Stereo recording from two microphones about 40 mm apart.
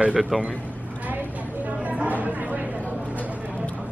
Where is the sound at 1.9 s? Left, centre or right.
Right.